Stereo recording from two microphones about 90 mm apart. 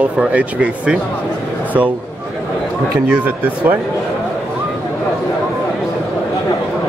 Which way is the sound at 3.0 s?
20° right (ahead or behind).